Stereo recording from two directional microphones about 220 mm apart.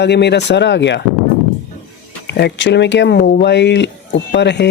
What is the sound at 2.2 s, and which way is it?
Speech, 50° left (ahead or behind).